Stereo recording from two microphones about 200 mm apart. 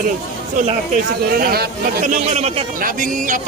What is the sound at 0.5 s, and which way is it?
Speech, 40° right (ahead or behind).